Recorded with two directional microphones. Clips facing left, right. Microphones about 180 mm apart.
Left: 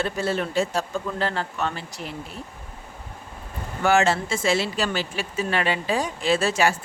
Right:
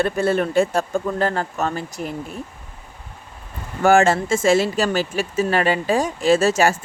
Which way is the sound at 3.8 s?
50° right (ahead or behind).